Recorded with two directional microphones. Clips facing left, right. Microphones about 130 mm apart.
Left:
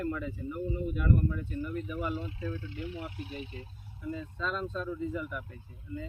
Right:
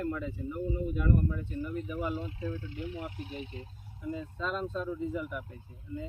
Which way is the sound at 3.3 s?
20° right (ahead or behind).